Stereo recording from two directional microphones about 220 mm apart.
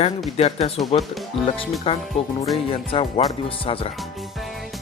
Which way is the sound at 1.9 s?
25° left (ahead or behind).